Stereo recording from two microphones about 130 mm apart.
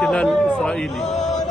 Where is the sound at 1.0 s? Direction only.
60° left (ahead or behind).